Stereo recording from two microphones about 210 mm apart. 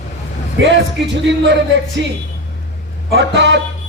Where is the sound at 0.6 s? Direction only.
55° right (ahead or behind).